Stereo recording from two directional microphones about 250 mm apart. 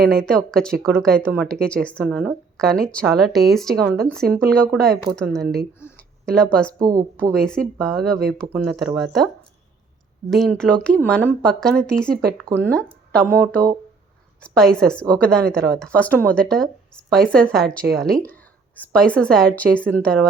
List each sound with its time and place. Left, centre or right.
0.2 s a woman's voice: centre
5.8 s a sound: centre
6.7 s speech: centre
7.3 s a woman's voice: centre
10.2 s a woman's voice: centre
12.5 s speech: centre
12.7 s speech: centre
14.4 s a woman's voice: centre